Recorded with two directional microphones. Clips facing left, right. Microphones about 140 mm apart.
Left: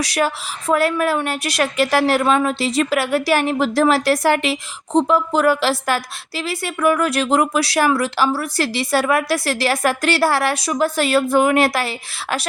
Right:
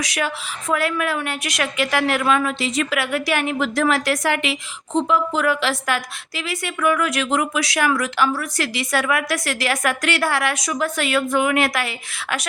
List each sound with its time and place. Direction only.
0.0 s a woman's voice: 35° left (ahead or behind)